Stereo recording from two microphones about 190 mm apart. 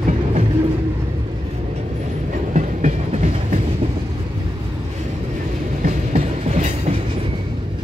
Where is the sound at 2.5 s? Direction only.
40° right (ahead or behind).